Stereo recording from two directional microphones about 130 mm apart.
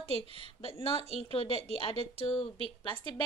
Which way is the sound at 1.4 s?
50° right (ahead or behind).